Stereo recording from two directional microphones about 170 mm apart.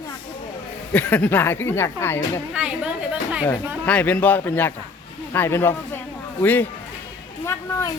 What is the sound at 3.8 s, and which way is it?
Speech, 10° left (ahead or behind).